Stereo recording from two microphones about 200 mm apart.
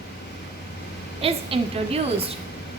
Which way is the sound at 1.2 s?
30° right (ahead or behind).